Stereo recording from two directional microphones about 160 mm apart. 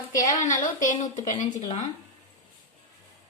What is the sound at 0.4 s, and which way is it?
A woman's voice, 55° left (ahead or behind).